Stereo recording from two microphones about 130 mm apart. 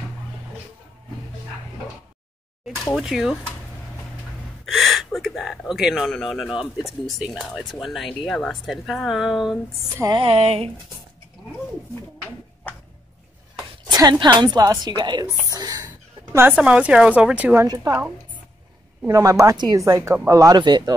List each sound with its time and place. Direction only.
2.9 s speech: 5° right (ahead or behind)
4.6 s speech: centre (ahead or behind)
10.1 s speech: 45° right (ahead or behind)
13.8 s a woman's voice: 30° right (ahead or behind)
15.4 s whispering: 30° right (ahead or behind)
16.5 s speech: 10° right (ahead or behind)
17.6 s speech: 25° right (ahead or behind)
19.0 s speech: 25° right (ahead or behind)